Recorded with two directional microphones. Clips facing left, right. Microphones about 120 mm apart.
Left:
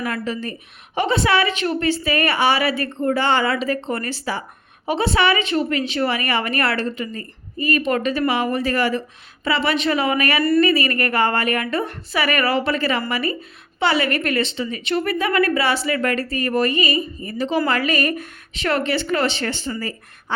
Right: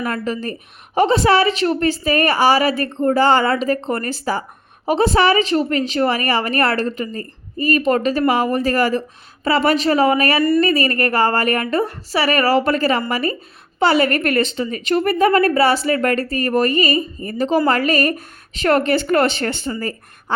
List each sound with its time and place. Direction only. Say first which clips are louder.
0.0 s a woman's voice: right 3 dB; 45° right (ahead or behind)